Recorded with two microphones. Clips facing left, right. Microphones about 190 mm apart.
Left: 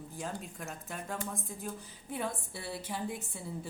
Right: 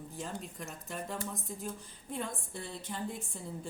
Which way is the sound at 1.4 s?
5° left (ahead or behind).